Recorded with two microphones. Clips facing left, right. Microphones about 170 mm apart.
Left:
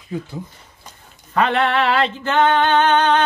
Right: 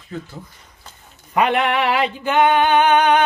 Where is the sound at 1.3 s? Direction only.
15° right (ahead or behind).